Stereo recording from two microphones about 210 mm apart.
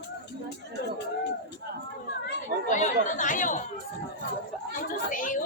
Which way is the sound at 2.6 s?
35° left (ahead or behind).